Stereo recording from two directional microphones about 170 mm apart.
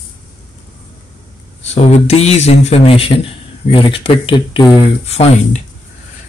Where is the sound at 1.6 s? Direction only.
40° left (ahead or behind).